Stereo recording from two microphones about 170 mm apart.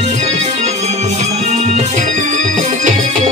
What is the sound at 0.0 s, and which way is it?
Music, 40° right (ahead or behind).